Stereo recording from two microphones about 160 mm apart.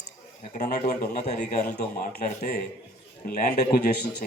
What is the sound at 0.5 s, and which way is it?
A man's voice, 50° left (ahead or behind).